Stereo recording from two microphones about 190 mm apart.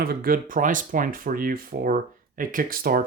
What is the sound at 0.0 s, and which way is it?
Speech, 50° right (ahead or behind).